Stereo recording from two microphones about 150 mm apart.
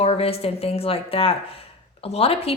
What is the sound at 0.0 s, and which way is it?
A woman's voice, 40° left (ahead or behind).